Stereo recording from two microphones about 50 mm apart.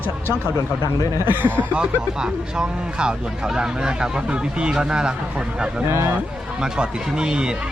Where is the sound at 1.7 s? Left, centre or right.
Centre.